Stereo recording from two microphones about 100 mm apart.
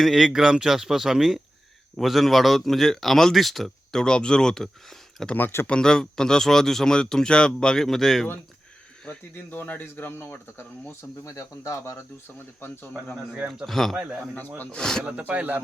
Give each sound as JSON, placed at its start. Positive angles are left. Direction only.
{"t": 0.0, "sound": "speech", "side_deg": -5}
{"t": 5.3, "sound": "speech", "side_deg": 20}
{"t": 5.6, "sound": "speech", "side_deg": 10}
{"t": 9.0, "sound": "speech", "side_deg": 20}
{"t": 11.3, "sound": "speech", "side_deg": 35}
{"t": 12.5, "sound": "speech", "side_deg": 20}
{"t": 13.3, "sound": "speech", "side_deg": -10}
{"t": 13.7, "sound": "speech", "side_deg": 5}
{"t": 13.9, "sound": "speech", "side_deg": -10}
{"t": 14.6, "sound": "speech", "side_deg": 10}
{"t": 15.0, "sound": "speech", "side_deg": -10}